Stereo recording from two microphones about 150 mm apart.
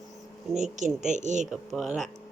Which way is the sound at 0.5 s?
50° right (ahead or behind).